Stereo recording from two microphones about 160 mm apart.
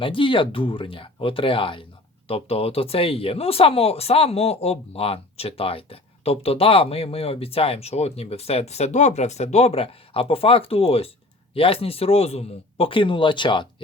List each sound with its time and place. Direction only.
0.0 s speech: 30° left (ahead or behind)